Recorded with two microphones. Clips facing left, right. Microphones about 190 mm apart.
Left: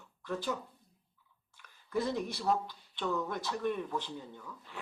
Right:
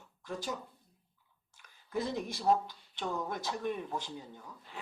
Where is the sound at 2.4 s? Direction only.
45° right (ahead or behind).